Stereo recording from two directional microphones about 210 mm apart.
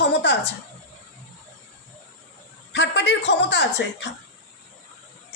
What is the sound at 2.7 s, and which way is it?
A woman's voice, 55° left (ahead or behind).